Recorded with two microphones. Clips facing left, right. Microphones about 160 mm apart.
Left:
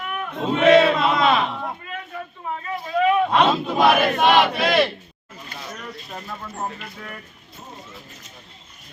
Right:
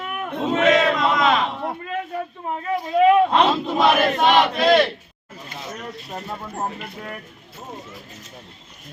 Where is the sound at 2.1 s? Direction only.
40° right (ahead or behind).